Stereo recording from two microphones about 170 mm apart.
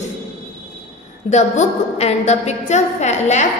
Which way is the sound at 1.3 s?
40° left (ahead or behind).